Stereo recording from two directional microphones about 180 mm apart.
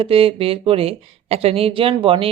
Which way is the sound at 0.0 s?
30° right (ahead or behind).